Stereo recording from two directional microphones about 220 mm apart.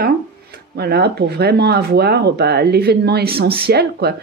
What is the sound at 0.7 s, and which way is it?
Speech, 45° right (ahead or behind).